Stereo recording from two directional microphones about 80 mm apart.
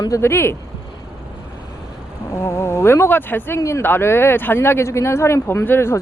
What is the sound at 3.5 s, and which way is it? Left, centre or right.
Speech, left.